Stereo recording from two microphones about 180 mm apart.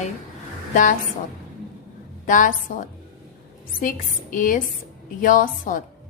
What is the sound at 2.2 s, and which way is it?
A woman's voice, 45° left (ahead or behind).